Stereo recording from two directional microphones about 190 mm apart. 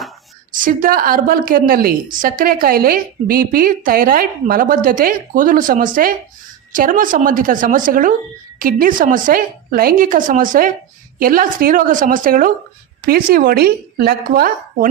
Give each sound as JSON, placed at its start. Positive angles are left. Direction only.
{"t": 0.5, "sound": "a woman's voice", "side_deg": -45}